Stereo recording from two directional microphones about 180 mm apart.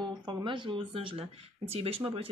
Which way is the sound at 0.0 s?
25° right (ahead or behind).